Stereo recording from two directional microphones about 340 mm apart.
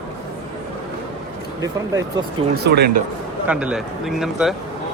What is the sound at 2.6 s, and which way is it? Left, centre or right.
Speech, right.